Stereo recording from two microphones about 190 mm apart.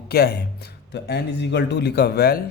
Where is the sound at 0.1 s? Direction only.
55° left (ahead or behind).